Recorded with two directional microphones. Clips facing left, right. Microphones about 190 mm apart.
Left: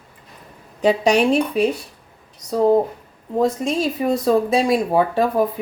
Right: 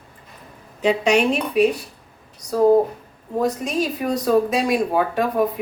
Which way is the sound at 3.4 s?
25° left (ahead or behind).